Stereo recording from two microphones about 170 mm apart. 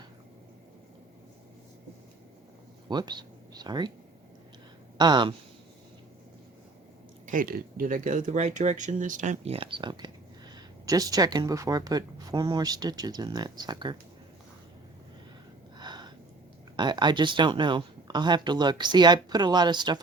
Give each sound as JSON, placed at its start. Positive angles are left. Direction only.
{"t": 2.9, "sound": "speech", "side_deg": -25}
{"t": 4.9, "sound": "speech", "side_deg": -25}
{"t": 7.3, "sound": "speech", "side_deg": -55}
{"t": 15.8, "sound": "gasp", "side_deg": -25}
{"t": 16.7, "sound": "speech", "side_deg": -25}